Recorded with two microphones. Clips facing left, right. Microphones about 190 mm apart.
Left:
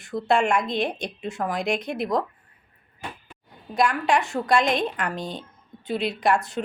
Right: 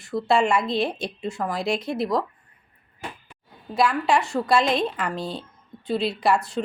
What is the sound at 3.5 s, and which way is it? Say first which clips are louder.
A woman's voice: right 1 dB; centre (ahead or behind).